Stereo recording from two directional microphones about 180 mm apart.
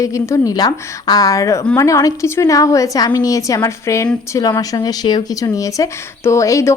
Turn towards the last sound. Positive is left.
turn(degrees=15)  # may be behind; listen again after turning